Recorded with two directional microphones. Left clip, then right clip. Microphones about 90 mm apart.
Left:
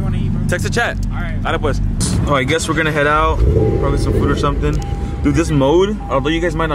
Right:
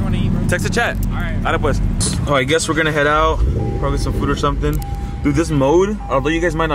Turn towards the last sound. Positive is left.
turn(degrees=0)  # may be behind; listen again after turning